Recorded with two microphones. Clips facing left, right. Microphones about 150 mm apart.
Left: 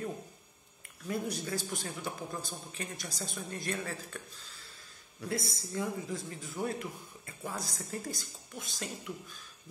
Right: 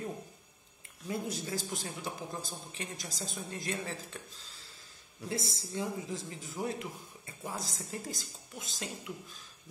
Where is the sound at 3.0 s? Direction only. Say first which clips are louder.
Left 1 dB; 25° right (ahead or behind).